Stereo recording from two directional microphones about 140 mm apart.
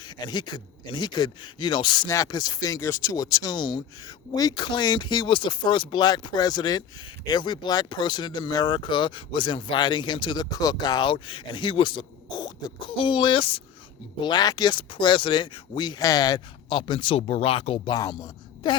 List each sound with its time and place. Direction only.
0.0 s a woman's voice: 30° left (ahead or behind)